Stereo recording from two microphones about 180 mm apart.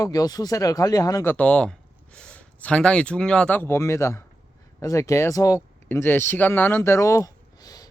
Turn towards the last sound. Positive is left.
turn(degrees=20)  # may be behind; listen again after turning